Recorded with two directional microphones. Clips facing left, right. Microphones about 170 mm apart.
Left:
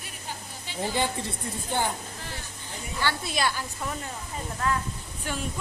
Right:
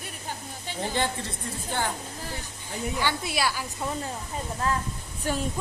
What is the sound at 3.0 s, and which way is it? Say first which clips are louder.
Speech: left 1 dB; 15° right (ahead or behind).